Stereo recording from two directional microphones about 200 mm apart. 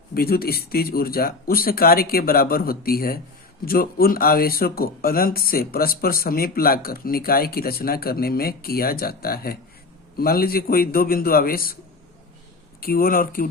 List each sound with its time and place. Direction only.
0.1 s speech: 50° left (ahead or behind)
12.8 s speech: 45° left (ahead or behind)